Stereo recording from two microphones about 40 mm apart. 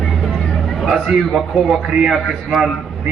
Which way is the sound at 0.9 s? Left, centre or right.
Centre.